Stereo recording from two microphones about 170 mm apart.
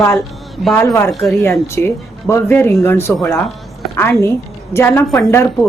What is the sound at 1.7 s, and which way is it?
Speech, 15° left (ahead or behind).